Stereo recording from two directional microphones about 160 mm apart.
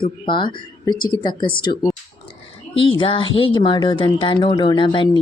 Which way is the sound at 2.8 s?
35° left (ahead or behind).